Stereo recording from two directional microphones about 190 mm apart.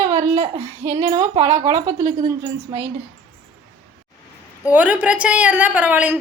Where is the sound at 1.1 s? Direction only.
20° right (ahead or behind).